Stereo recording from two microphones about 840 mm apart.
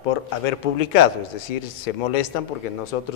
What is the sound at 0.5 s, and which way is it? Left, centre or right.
Speech, left.